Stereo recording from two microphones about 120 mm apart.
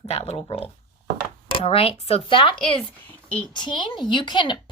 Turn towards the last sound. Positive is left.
turn(degrees=40)  # may be behind; listen again after turning